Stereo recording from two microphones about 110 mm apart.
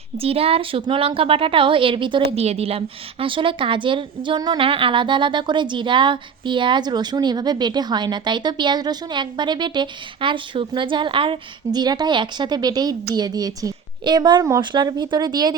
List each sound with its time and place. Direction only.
0.2 s a woman's voice: 60° right (ahead or behind)
2.4 s a woman's voice: 65° right (ahead or behind); by 15.5 s 40° right (ahead or behind)